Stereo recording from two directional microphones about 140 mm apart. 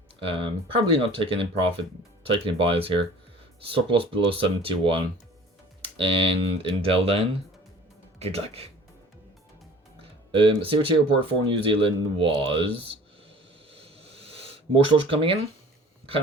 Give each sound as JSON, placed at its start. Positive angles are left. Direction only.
{"t": 0.3, "sound": "speech", "side_deg": -40}
{"t": 10.3, "sound": "speech", "side_deg": -40}
{"t": 13.7, "sound": "a sound", "side_deg": -45}